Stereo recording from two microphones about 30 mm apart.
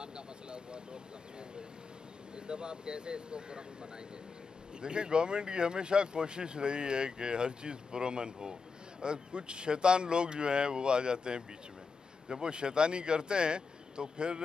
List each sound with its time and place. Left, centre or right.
0.0 s vehicle: right
2.3 s speech: right
4.7 s speech: right